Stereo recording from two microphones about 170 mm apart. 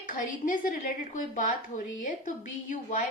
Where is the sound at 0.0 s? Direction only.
50° left (ahead or behind).